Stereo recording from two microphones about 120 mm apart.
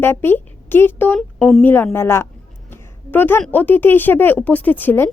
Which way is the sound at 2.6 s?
15° left (ahead or behind).